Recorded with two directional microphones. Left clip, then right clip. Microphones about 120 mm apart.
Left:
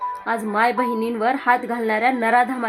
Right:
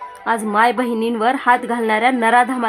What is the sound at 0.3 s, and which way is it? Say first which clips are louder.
A woman's voice: right 5 dB; 35° right (ahead or behind).